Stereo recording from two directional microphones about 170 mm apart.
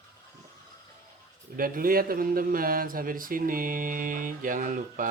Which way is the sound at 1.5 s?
55° right (ahead or behind).